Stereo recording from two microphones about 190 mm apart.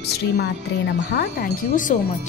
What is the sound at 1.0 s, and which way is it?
Speech, 50° left (ahead or behind).